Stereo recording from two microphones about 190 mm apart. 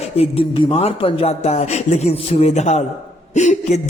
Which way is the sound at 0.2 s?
30° left (ahead or behind).